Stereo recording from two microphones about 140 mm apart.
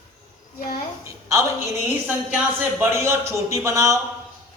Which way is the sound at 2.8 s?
20° right (ahead or behind).